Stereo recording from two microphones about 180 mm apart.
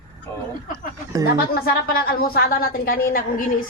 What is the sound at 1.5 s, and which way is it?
A woman's voice, 60° left (ahead or behind).